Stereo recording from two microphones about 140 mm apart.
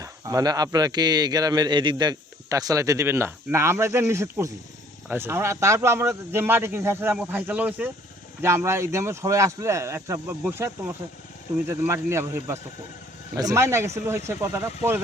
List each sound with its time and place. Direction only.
0.0 s a man's voice: 25° right (ahead or behind)